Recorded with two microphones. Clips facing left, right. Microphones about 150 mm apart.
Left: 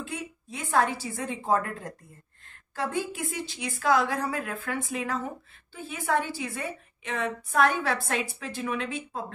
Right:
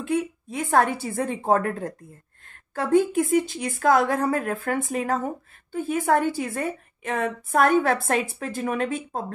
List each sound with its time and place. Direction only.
0.0 s a woman's voice: 55° right (ahead or behind)